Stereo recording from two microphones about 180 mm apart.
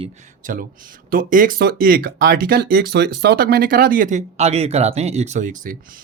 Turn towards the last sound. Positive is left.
turn(degrees=-45)  # may be behind; listen again after turning